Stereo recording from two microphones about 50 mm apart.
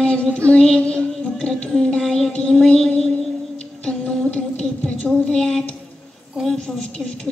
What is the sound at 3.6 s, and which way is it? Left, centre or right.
A woman's voice, left.